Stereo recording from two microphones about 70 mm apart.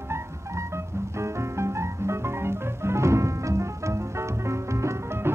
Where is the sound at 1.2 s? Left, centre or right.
Right.